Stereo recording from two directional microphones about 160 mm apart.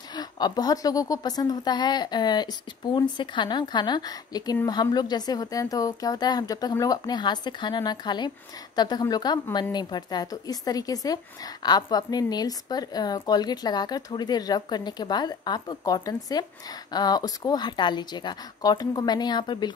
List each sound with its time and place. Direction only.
0.1 s speech: 25° left (ahead or behind)